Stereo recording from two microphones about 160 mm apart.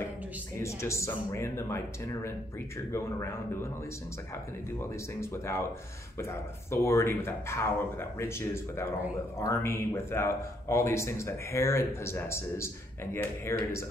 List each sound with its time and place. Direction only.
0.6 s a man's voice: 15° left (ahead or behind)
5.2 s a man's voice: 15° left (ahead or behind)
6.7 s a man's voice: 15° left (ahead or behind)